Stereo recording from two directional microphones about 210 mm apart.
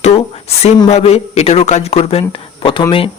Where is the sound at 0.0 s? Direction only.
30° left (ahead or behind).